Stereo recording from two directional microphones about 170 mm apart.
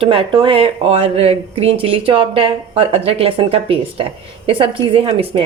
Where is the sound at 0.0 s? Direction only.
30° right (ahead or behind).